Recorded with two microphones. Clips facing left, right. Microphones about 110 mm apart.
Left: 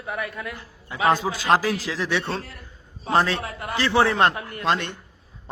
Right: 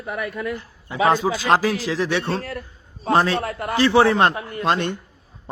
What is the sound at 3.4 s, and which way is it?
Speech, 50° right (ahead or behind).